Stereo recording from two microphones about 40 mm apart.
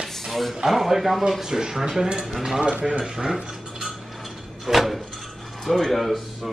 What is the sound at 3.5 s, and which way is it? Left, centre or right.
Mechanisms, centre.